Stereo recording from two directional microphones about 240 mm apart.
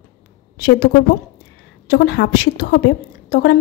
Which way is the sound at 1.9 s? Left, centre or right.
Left.